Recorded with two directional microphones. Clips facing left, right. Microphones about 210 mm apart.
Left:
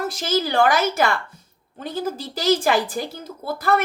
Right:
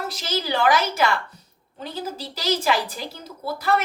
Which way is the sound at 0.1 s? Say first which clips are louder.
Left 4 dB; 50° left (ahead or behind).